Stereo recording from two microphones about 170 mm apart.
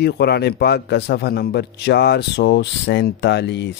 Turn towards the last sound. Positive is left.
turn(degrees=90)